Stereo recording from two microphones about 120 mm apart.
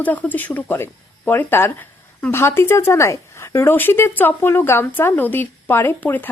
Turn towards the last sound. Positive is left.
turn(degrees=15)  # may be behind; listen again after turning